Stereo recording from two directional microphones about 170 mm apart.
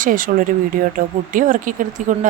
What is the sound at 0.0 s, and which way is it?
A woman's voice, 55° right (ahead or behind).